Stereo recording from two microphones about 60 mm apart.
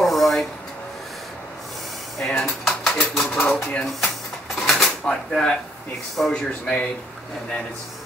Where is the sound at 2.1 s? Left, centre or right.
Centre.